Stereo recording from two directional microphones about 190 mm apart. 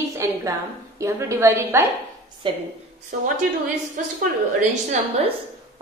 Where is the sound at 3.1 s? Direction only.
45° right (ahead or behind).